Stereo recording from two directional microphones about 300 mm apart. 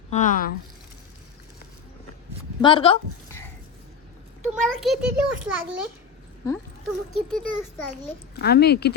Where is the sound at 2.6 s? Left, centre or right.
Centre.